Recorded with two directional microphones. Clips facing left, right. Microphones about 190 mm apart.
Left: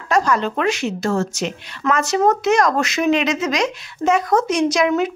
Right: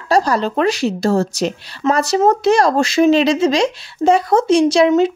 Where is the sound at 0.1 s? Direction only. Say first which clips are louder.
Right 3 dB; 35° right (ahead or behind).